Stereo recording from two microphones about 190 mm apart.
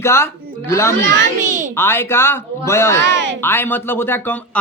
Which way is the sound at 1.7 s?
10° left (ahead or behind).